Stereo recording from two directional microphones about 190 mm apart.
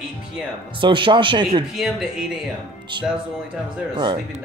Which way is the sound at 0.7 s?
25° right (ahead or behind).